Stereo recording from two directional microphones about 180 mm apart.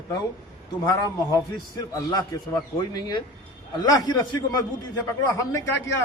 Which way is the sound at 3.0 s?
20° left (ahead or behind).